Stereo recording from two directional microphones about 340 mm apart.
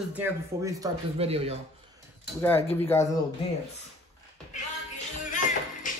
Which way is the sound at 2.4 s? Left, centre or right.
Centre.